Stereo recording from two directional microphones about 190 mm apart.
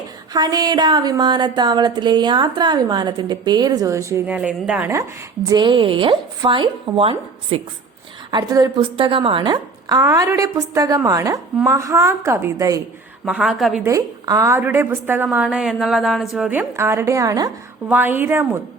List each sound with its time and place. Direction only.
0.3 s a woman's voice: 20° right (ahead or behind)
13.2 s a woman's voice: 5° right (ahead or behind)
13.8 s a woman's voice: 20° right (ahead or behind)